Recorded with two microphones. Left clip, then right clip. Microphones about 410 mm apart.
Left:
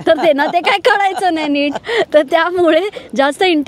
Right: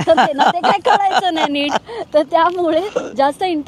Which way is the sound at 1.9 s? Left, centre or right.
Left.